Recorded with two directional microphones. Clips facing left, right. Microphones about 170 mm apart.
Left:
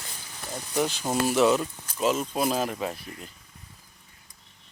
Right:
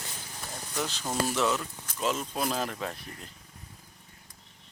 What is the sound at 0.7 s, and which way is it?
Speech, 15° left (ahead or behind).